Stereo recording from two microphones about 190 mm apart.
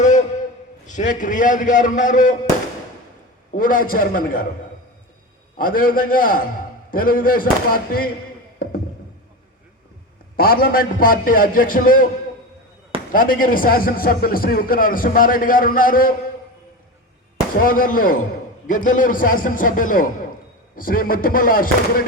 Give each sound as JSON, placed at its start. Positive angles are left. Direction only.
{"t": 0.0, "sound": "a sound", "side_deg": 40}
{"t": 0.9, "sound": "a man's voice", "side_deg": 40}
{"t": 3.5, "sound": "a man's voice", "side_deg": 45}
{"t": 5.5, "sound": "a man's voice", "side_deg": 45}
{"t": 10.3, "sound": "a man's voice", "side_deg": 50}
{"t": 13.1, "sound": "a man's voice", "side_deg": 45}
{"t": 17.6, "sound": "a man's voice", "side_deg": 45}